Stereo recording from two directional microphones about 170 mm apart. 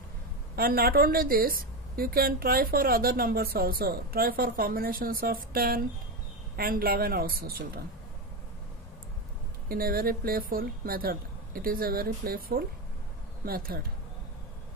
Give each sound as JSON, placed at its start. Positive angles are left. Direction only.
{"t": 0.6, "sound": "a woman's voice", "side_deg": -60}
{"t": 9.7, "sound": "a woman's voice", "side_deg": -60}